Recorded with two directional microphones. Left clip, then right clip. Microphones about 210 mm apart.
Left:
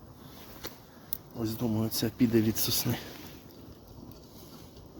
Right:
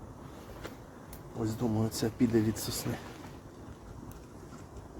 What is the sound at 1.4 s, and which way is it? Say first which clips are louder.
Speech: even; 40° left (ahead or behind).